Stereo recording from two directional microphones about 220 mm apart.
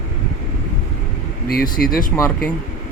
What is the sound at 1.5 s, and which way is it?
Speech, 40° left (ahead or behind).